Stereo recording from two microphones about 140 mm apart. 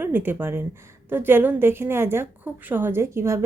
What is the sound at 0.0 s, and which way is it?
A woman's voice, 15° right (ahead or behind).